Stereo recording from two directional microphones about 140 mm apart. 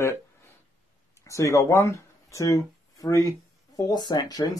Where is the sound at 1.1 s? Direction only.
20° left (ahead or behind).